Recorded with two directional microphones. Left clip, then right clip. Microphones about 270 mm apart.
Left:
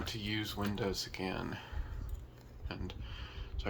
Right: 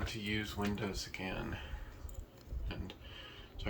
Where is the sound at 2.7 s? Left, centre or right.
Centre.